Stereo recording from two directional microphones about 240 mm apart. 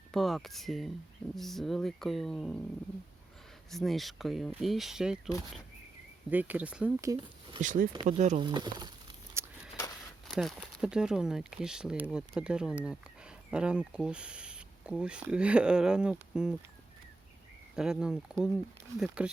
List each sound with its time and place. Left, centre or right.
0.1 s speech: centre
3.7 s speech: centre
6.3 s speech: centre
7.6 s speech: right
8.4 s speech: centre
9.4 s a sound: centre
10.3 s speech: centre
17.7 s speech: centre